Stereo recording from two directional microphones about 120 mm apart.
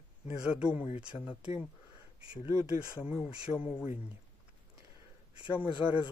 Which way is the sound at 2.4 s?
10° right (ahead or behind).